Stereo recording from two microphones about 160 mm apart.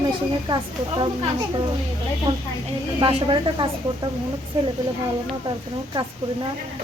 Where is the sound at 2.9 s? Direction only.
30° right (ahead or behind).